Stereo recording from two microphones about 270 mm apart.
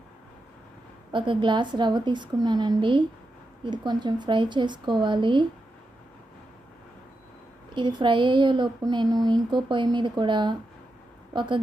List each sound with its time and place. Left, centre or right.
1.1 s speech: centre
7.7 s speech: centre